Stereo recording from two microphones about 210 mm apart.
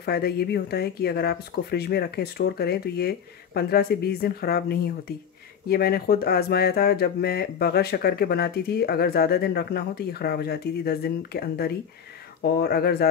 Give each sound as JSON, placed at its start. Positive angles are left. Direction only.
{"t": 0.0, "sound": "speech", "side_deg": 50}